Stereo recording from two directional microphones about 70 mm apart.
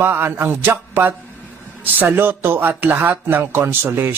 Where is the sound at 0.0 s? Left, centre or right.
Right.